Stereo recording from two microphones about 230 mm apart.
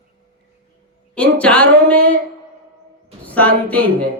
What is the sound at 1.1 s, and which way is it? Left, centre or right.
Speech, centre.